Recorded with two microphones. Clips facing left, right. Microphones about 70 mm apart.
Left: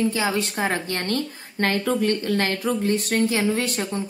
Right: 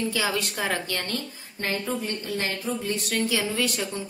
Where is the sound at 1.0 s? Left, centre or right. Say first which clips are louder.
Left 7 dB; left.